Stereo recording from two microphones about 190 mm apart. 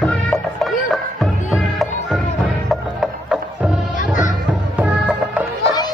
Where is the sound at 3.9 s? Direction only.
40° left (ahead or behind).